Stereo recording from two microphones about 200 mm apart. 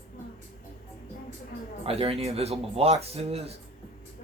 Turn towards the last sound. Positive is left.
turn(degrees=-30)  # may be behind; listen again after turning